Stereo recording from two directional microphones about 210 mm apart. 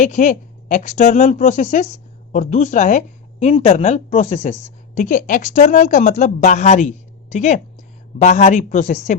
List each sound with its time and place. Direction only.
0.0 s speech: 35° left (ahead or behind)